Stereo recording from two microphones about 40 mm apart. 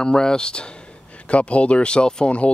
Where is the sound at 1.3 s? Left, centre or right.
Left.